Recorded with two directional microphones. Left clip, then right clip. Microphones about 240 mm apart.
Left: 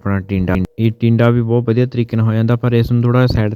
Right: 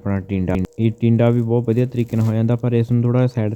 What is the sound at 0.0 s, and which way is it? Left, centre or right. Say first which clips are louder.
A man's voice: left 4 dB; left.